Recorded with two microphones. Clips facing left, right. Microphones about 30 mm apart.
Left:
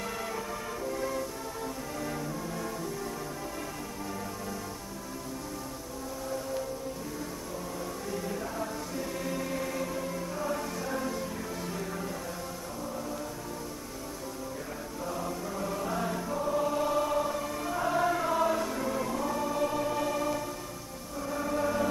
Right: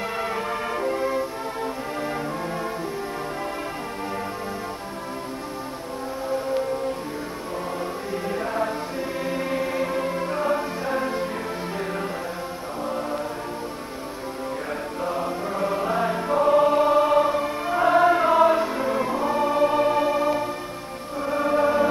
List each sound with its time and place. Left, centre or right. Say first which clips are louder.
0.2 s music: right 9 dB; right
8.1 s music: right 8 dB; right
15.0 s choir: right 8 dB; right